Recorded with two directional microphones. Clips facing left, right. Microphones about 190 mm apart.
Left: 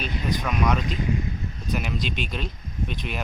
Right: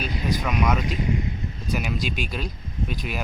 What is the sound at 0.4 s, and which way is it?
Speech, centre (ahead or behind).